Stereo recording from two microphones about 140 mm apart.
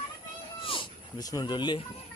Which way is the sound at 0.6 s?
35° left (ahead or behind).